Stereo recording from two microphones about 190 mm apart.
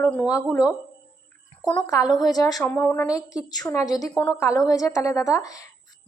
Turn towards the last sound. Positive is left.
turn(degrees=20)  # may be behind; listen again after turning